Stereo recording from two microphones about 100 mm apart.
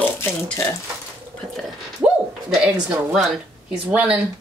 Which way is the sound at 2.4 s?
10° right (ahead or behind).